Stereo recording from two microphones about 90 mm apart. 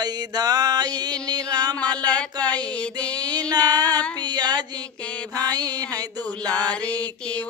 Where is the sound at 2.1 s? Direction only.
15° left (ahead or behind).